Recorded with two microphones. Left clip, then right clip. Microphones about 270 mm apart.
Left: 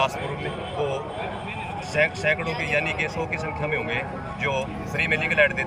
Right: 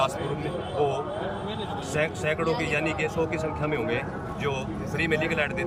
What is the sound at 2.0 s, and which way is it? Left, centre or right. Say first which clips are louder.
Speech: left 3 dB; centre.